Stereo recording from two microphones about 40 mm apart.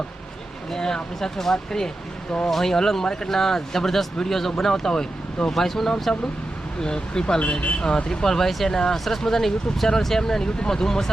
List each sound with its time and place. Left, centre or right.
0.7 s speech: centre
6.8 s speech: centre